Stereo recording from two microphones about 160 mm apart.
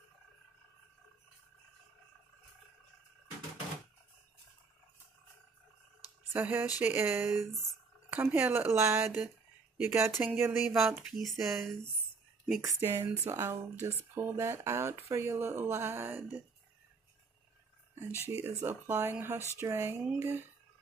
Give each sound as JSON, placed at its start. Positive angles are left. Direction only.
{"t": 6.3, "sound": "speech", "side_deg": -10}
{"t": 12.6, "sound": "speech", "side_deg": -15}
{"t": 17.9, "sound": "speech", "side_deg": -15}